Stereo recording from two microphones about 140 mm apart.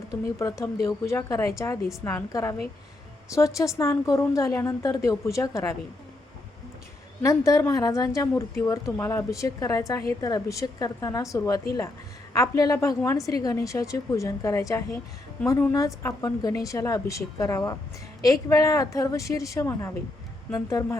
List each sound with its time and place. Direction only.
0.1 s a woman's voice: 25° left (ahead or behind)
7.2 s a woman's voice: 25° left (ahead or behind)